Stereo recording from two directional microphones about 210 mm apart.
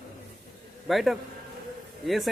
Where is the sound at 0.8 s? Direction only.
Centre (ahead or behind).